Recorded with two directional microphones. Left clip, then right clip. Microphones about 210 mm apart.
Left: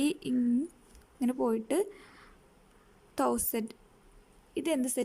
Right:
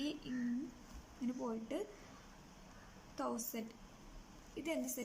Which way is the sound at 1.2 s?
50° left (ahead or behind).